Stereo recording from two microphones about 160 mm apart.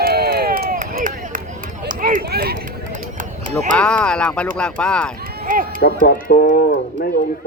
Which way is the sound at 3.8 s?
5° left (ahead or behind).